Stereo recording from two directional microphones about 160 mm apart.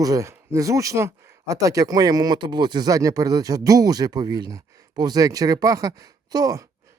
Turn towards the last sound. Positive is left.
turn(degrees=-20)  # may be behind; listen again after turning